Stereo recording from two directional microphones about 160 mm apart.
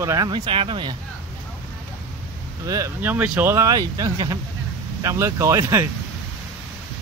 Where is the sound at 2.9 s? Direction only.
10° right (ahead or behind).